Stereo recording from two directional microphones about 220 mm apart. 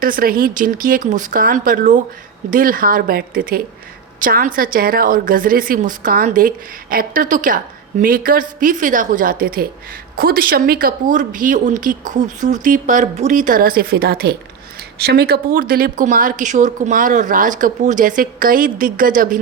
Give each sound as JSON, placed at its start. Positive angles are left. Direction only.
{"t": 0.0, "sound": "a woman's voice", "side_deg": -40}